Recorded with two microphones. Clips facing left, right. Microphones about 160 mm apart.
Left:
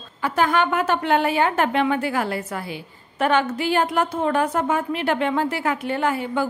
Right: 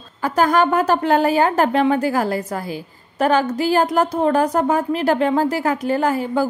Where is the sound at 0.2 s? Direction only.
40° right (ahead or behind).